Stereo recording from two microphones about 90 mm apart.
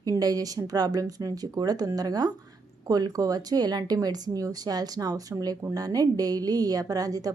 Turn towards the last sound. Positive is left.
turn(degrees=-45)  # may be behind; listen again after turning